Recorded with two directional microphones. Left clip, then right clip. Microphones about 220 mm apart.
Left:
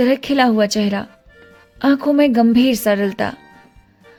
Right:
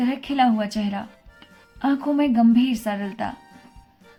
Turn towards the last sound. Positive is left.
turn(degrees=55)  # may be behind; listen again after turning